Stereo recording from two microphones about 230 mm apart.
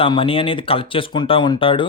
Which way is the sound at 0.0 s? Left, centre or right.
Left.